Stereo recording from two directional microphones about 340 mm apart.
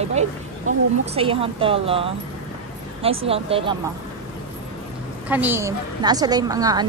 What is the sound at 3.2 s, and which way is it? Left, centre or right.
Speech, centre.